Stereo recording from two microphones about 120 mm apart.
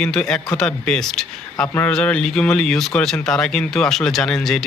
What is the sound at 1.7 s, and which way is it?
Speech, 15° left (ahead or behind).